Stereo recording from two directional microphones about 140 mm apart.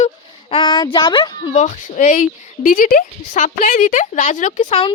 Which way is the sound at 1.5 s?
55° left (ahead or behind).